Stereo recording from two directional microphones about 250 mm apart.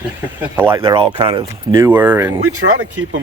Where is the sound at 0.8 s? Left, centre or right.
Right.